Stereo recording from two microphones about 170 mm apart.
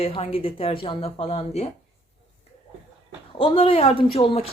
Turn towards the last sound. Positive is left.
turn(degrees=30)  # may be behind; listen again after turning